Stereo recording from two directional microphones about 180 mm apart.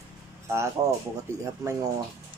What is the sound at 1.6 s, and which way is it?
Speech, 15° right (ahead or behind).